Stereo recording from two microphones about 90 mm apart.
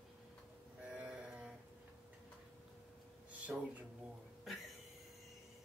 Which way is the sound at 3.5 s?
20° right (ahead or behind).